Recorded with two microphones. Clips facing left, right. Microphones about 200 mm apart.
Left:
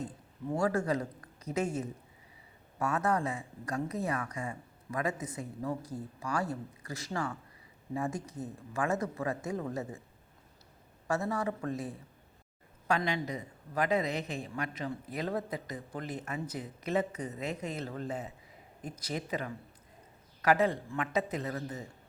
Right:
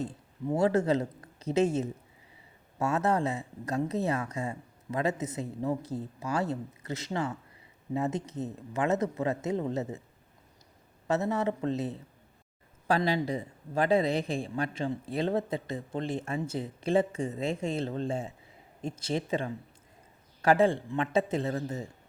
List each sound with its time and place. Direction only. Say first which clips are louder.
0.0 s speech: right 5 dB; 25° right (ahead or behind)
11.1 s speech: right 4 dB; 20° right (ahead or behind)